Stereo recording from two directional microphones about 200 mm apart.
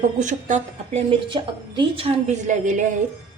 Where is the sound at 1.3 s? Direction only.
25° right (ahead or behind).